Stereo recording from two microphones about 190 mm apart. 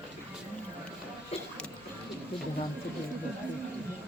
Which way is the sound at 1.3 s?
30° left (ahead or behind).